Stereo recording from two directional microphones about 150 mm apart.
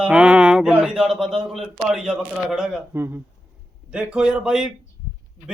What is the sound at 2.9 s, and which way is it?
Speech, 15° right (ahead or behind).